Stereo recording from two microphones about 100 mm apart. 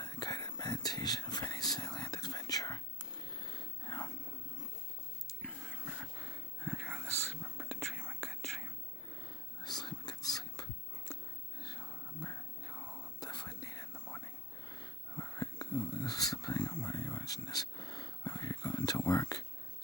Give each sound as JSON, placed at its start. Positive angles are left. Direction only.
{"t": 0.0, "sound": "whispering", "side_deg": 45}
{"t": 5.4, "sound": "whispering", "side_deg": 10}
{"t": 5.8, "sound": "whispering", "side_deg": 0}
{"t": 9.6, "sound": "whispering", "side_deg": 45}
{"t": 14.7, "sound": "wheeze", "side_deg": 40}
{"t": 15.9, "sound": "a sound", "side_deg": 40}